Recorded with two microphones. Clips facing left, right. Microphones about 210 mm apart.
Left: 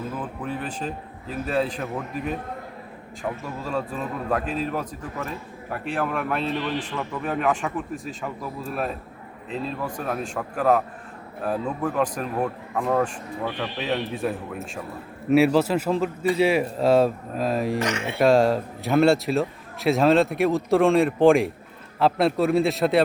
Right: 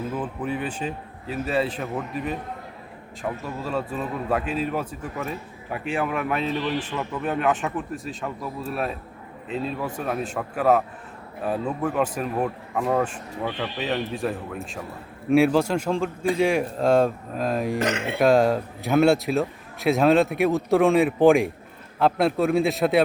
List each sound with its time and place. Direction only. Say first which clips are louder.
0.4 s speech: right 1 dB; 10° right (ahead or behind)
17.7 s speech: right 1 dB; 55° right (ahead or behind)
18.2 s speech: even; centre (ahead or behind)